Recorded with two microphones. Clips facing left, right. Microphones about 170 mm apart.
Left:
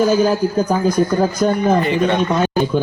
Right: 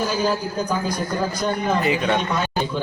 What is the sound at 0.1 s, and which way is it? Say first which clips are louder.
Speech: left 8 dB; 50° left (ahead or behind).